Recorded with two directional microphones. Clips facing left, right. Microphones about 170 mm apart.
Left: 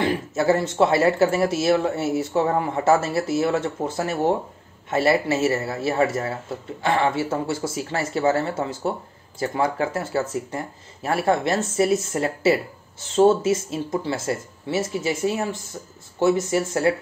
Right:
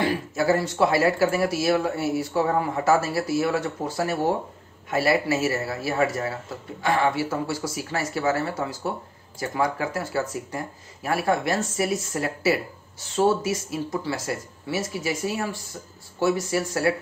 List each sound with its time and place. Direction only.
0.0 s speech: 25° left (ahead or behind)